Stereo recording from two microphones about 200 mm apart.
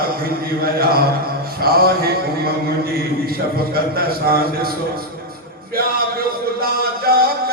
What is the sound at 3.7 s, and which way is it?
A man's voice, 50° right (ahead or behind).